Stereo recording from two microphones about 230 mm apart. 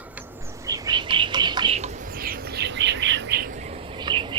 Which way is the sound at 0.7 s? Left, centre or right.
Centre.